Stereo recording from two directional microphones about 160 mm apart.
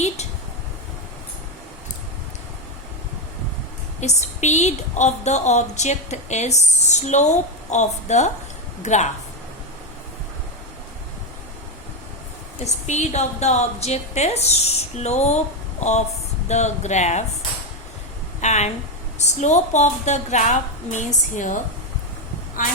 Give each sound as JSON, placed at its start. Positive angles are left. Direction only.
{"t": 4.0, "sound": "a woman's voice", "side_deg": 45}
{"t": 12.6, "sound": "a woman's voice", "side_deg": 45}
{"t": 18.3, "sound": "a woman's voice", "side_deg": 45}